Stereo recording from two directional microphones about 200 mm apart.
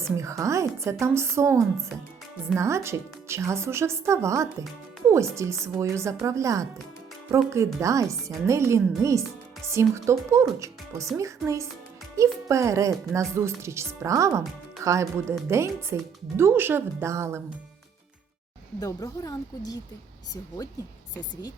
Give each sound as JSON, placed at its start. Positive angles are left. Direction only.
{"t": 0.2, "sound": "speech", "side_deg": -15}
{"t": 18.8, "sound": "speech", "side_deg": 15}